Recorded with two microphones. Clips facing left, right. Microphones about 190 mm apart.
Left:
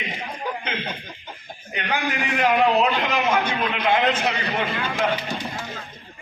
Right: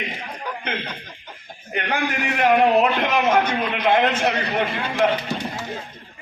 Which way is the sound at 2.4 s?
50° right (ahead or behind).